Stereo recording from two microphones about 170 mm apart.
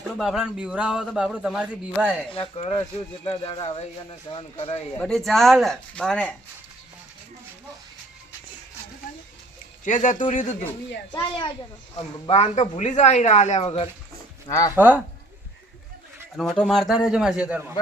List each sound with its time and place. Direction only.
0.2 s a man's voice: 5° right (ahead or behind)
2.3 s speech: 35° left (ahead or behind)
4.9 s a man's voice: 5° left (ahead or behind)
9.8 s speech: 45° left (ahead or behind)
11.1 s a child's voice: 25° left (ahead or behind)
14.4 s speech: 20° left (ahead or behind)
14.8 s speech: 10° right (ahead or behind)
16.4 s a man's voice: centre (ahead or behind)